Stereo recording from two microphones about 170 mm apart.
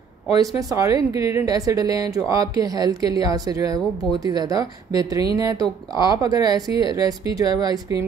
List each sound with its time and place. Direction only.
0.4 s speech: 20° right (ahead or behind)
6.7 s speech: 30° left (ahead or behind)
7.0 s speech: 20° right (ahead or behind)